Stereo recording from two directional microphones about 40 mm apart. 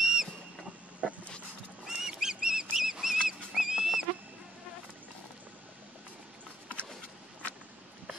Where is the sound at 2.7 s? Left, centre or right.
Centre.